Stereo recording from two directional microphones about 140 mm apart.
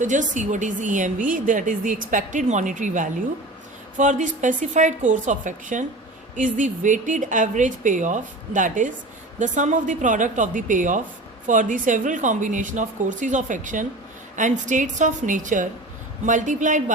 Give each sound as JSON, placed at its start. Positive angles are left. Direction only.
{"t": 0.0, "sound": "a woman's voice", "side_deg": -60}